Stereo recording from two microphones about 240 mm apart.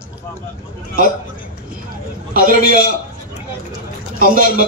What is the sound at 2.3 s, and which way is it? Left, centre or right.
Speech, right.